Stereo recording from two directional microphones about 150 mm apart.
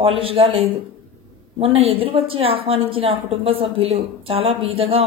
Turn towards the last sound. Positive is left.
turn(degrees=-40)  # may be behind; listen again after turning